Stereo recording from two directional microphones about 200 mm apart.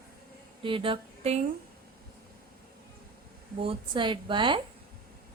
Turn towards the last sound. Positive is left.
turn(degrees=-25)  # may be behind; listen again after turning